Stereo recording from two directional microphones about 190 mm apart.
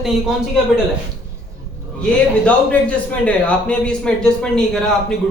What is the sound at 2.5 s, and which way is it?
A man's voice, 5° left (ahead or behind).